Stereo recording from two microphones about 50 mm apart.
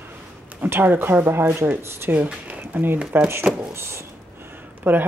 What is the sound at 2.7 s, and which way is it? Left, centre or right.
Speech, right.